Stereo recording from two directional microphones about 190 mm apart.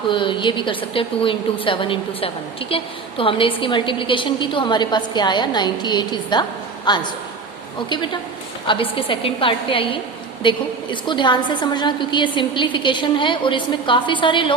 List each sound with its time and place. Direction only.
0.1 s a woman's voice: 25° left (ahead or behind)